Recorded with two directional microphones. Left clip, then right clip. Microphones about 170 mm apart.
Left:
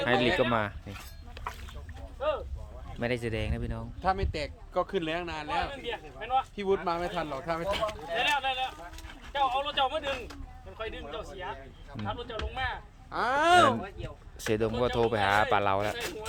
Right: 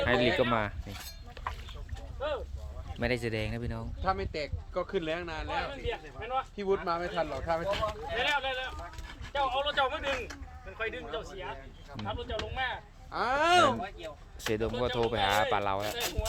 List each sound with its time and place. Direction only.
0.0 s speech: centre (ahead or behind)
1.4 s boat: 35° left (ahead or behind)
3.0 s speech: centre (ahead or behind)
4.0 s a man's voice: 65° left (ahead or behind)
5.8 s a man's voice: 55° left (ahead or behind)
6.8 s speech: 75° left (ahead or behind)
8.2 s a man's voice: 50° left (ahead or behind)
12.0 s speech: 25° left (ahead or behind)
13.1 s speech: 35° left (ahead or behind)
13.8 s speech: 65° right (ahead or behind)
14.8 s speech: 20° left (ahead or behind)